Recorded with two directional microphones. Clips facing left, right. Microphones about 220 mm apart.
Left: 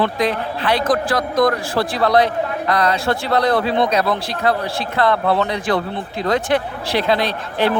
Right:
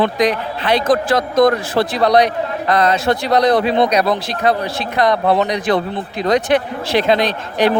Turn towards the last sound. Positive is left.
turn(degrees=-15)  # may be behind; listen again after turning